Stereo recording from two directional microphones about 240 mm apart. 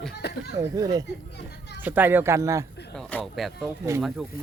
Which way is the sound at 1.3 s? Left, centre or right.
Left.